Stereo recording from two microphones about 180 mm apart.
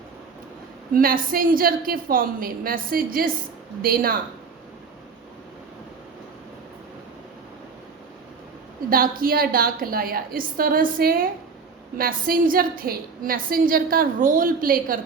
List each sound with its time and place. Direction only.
0.9 s a woman's voice: 50° right (ahead or behind)
8.9 s a woman's voice: 55° right (ahead or behind)